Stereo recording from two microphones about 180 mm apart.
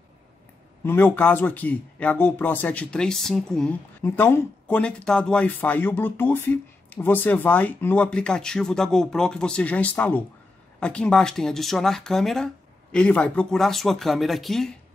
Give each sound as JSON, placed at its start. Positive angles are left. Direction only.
{"t": 0.8, "sound": "speech", "side_deg": 10}